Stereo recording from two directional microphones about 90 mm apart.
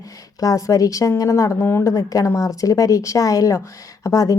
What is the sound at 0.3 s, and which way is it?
A woman's voice, 40° left (ahead or behind).